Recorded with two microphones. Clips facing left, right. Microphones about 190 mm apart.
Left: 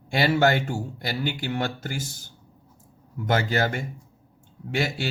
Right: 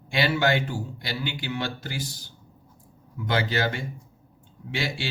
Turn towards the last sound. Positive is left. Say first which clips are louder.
# left 4 dB
turn(degrees=45)  # may be behind; listen again after turning